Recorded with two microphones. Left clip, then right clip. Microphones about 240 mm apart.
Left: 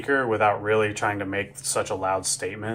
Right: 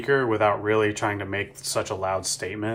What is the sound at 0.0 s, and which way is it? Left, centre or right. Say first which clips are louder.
Speech: even; right.